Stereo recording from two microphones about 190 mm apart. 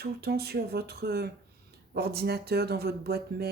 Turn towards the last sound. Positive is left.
turn(degrees=-55)  # may be behind; listen again after turning